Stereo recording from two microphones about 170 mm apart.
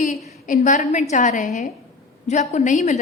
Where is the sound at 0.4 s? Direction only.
50° left (ahead or behind).